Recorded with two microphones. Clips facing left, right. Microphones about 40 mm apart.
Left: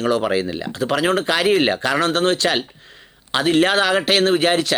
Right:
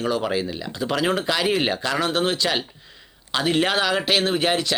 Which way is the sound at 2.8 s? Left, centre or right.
Left.